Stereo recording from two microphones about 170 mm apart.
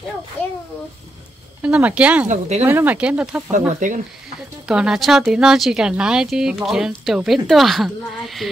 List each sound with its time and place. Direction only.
1.6 s speech: 10° right (ahead or behind)
3.5 s speech: 50° right (ahead or behind)
4.6 s speech: 5° right (ahead or behind)